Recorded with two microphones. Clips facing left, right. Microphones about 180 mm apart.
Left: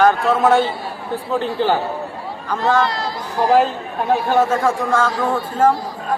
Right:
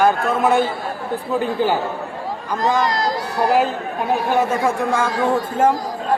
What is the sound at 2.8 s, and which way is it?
Speech, 40° right (ahead or behind).